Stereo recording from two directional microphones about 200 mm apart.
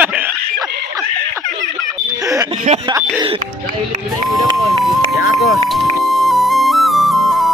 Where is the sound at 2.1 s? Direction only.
15° right (ahead or behind).